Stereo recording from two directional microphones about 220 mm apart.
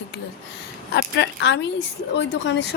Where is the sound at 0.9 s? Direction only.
50° left (ahead or behind).